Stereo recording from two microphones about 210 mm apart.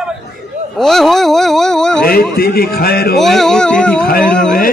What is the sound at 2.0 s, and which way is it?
A man's voice, 45° left (ahead or behind).